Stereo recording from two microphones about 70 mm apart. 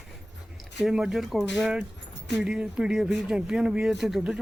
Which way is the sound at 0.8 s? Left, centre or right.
Centre.